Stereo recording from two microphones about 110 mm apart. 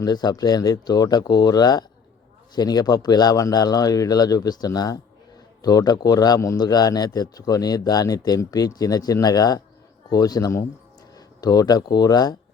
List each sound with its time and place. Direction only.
0.0 s a man's voice: 40° left (ahead or behind)